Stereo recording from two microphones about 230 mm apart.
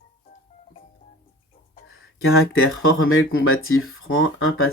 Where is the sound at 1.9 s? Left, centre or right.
Left.